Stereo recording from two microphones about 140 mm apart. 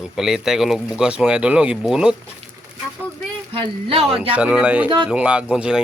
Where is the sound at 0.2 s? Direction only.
5° right (ahead or behind).